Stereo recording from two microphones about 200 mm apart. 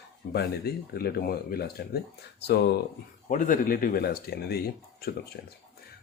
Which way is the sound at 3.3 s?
40° left (ahead or behind).